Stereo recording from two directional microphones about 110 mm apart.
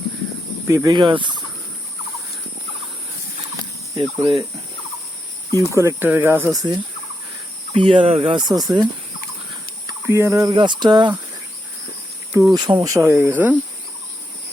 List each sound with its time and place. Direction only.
0.7 s speech: 30° right (ahead or behind)
1.0 s speech: 45° right (ahead or behind)
3.6 s a sound: 35° right (ahead or behind)
5.5 s speech: 25° right (ahead or behind)
6.5 s speech: 35° right (ahead or behind)
7.7 s speech: 55° right (ahead or behind); by 8.9 s 40° right (ahead or behind)
9.8 s speech: 25° right (ahead or behind)
10.5 s speech: 45° right (ahead or behind)
12.3 s speech: 25° right (ahead or behind)